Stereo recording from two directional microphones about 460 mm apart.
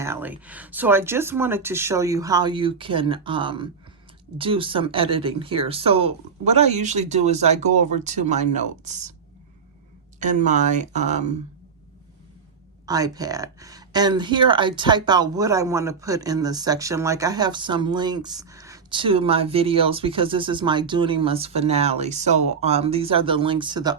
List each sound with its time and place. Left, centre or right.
0.0 s speech: centre
10.2 s speech: centre
12.8 s speech: centre